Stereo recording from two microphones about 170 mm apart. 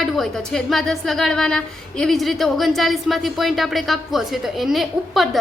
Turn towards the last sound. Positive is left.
turn(degrees=0)  # may be behind; listen again after turning